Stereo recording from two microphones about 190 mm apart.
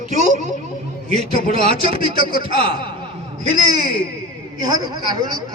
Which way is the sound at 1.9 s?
50° left (ahead or behind).